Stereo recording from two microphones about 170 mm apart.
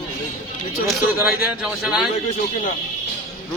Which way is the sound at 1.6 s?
5° right (ahead or behind).